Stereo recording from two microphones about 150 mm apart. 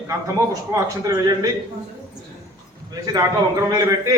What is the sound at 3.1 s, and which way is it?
Speech, 25° right (ahead or behind).